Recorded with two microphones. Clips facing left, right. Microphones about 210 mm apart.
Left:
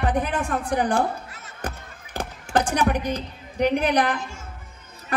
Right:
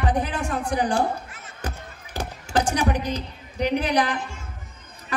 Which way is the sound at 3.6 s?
55° left (ahead or behind).